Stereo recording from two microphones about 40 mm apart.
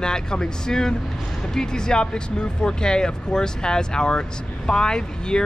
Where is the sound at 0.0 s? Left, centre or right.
Centre.